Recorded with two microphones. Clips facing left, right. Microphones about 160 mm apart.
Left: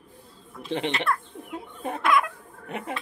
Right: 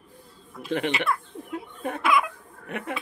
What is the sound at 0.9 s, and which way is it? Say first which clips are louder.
Speech: left 1 dB; 5° right (ahead or behind).